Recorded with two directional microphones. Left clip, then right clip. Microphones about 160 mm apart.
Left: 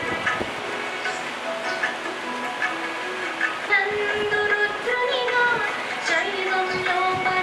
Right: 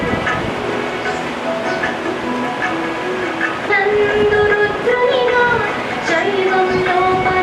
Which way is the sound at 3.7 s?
10° right (ahead or behind).